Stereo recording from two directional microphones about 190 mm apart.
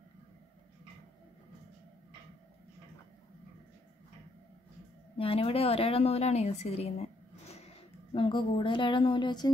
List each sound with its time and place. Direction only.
5.1 s a woman's voice: 30° left (ahead or behind)